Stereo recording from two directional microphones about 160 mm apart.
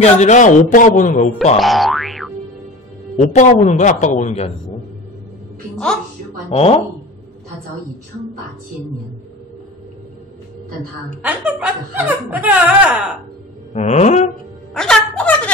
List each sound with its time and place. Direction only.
0.0 s a man's voice: 50° left (ahead or behind)
1.6 s boing: centre (ahead or behind)
3.2 s a man's voice: 50° left (ahead or behind)
6.5 s speech: 40° left (ahead or behind)
11.2 s speech: 10° right (ahead or behind)
13.7 s a man's voice: 45° left (ahead or behind)
14.7 s speech: 5° left (ahead or behind)